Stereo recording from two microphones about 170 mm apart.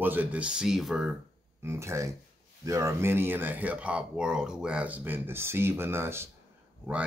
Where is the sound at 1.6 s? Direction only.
15° right (ahead or behind).